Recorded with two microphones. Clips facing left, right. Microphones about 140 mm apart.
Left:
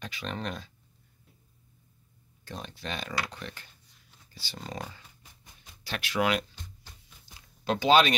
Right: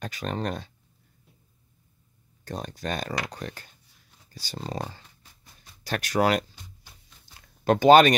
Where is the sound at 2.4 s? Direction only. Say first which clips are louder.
Right 6 dB; 45° right (ahead or behind).